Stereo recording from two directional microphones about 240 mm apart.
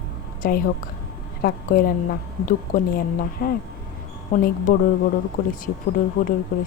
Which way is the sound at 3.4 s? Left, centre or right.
Left.